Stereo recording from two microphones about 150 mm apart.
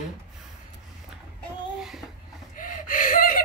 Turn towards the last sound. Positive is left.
turn(degrees=65)  # may be behind; listen again after turning